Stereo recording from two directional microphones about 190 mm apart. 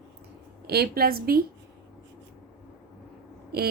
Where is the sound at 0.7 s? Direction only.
55° right (ahead or behind).